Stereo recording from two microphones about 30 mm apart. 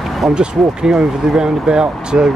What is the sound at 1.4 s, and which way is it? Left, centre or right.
Speech, right.